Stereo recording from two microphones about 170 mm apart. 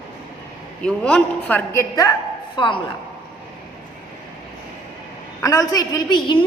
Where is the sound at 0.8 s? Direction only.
5° left (ahead or behind).